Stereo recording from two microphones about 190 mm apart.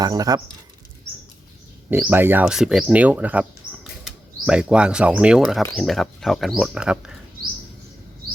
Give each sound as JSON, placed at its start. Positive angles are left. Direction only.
{"t": 0.0, "sound": "speech", "side_deg": -20}
{"t": 1.9, "sound": "speech", "side_deg": -10}